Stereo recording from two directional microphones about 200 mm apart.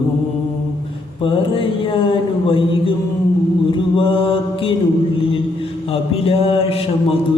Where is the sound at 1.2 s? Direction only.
25° left (ahead or behind).